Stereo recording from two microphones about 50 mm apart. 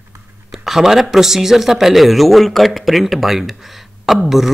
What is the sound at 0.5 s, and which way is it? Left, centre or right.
Speech, centre.